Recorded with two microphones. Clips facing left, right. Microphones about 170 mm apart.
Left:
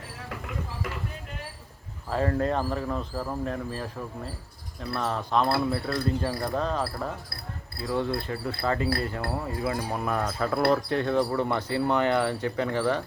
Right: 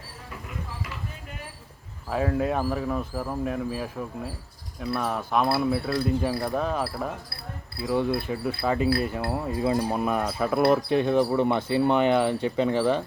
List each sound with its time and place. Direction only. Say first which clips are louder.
2.0 s speech: right 1 dB; 5° right (ahead or behind)